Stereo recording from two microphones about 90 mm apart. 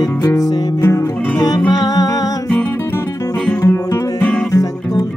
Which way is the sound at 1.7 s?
50° left (ahead or behind).